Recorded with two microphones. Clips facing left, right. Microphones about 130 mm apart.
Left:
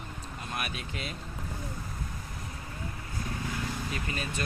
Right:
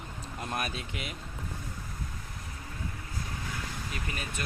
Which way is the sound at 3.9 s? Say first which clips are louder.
Left 3 dB; 10° right (ahead or behind).